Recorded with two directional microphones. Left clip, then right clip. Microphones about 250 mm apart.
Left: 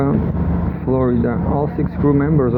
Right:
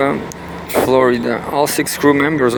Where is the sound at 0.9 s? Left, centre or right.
Right.